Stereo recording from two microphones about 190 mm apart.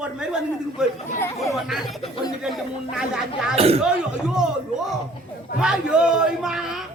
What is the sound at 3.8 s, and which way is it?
Speech, 5° right (ahead or behind).